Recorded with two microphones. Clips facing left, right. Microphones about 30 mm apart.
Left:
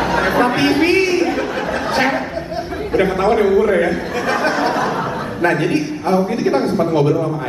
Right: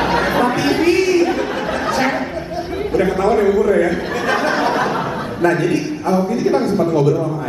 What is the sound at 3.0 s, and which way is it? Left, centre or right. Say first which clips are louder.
Speech: even; left.